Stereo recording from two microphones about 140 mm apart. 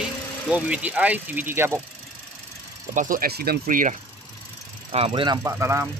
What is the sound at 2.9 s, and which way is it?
Speech, 75° right (ahead or behind).